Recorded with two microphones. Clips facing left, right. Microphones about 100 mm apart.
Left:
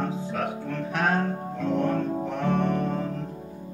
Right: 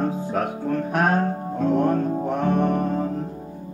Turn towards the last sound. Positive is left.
turn(degrees=-45)  # may be behind; listen again after turning